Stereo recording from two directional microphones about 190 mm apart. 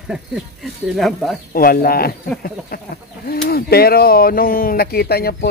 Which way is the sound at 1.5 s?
50° left (ahead or behind).